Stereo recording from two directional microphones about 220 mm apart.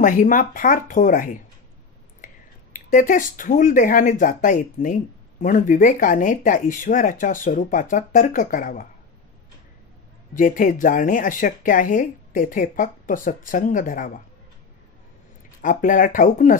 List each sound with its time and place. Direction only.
0.0 s speech: 35° left (ahead or behind)
10.3 s speech: 35° left (ahead or behind)
15.6 s speech: 35° left (ahead or behind)